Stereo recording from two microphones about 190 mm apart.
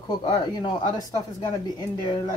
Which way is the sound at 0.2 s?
25° left (ahead or behind).